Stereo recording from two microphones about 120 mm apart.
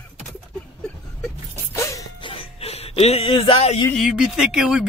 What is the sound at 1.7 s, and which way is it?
Music, 25° left (ahead or behind).